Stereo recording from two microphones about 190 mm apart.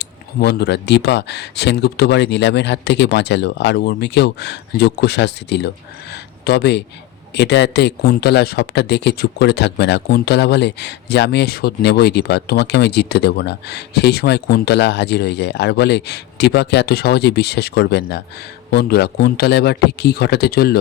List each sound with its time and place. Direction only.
0.0 s speech: 60° left (ahead or behind)